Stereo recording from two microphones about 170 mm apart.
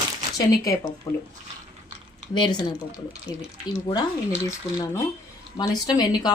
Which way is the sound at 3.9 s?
25° left (ahead or behind).